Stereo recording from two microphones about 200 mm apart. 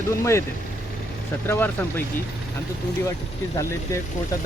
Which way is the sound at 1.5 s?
10° left (ahead or behind).